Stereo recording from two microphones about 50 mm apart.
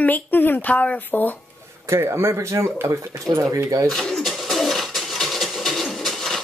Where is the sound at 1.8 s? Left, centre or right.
Right.